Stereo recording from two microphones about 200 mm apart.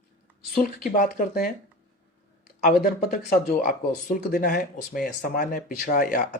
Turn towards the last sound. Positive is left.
turn(degrees=40)  # may be behind; listen again after turning